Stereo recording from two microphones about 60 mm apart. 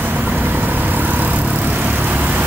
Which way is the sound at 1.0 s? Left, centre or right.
Right.